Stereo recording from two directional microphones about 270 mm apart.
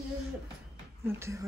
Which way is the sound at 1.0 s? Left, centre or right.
Centre.